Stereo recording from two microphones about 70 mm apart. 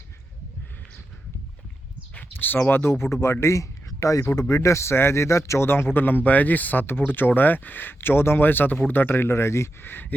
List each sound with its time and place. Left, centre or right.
2.3 s a man's voice: left